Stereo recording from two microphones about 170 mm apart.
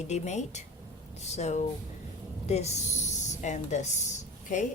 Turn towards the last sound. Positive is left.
turn(degrees=45)  # may be behind; listen again after turning